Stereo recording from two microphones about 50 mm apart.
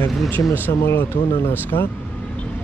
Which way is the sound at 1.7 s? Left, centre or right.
Left.